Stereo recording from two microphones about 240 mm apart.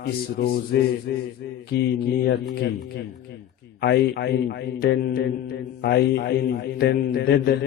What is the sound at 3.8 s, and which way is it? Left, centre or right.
A man's voice, left.